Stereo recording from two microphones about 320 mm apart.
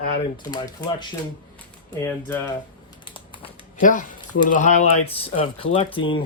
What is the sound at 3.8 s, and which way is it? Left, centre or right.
Speech, left.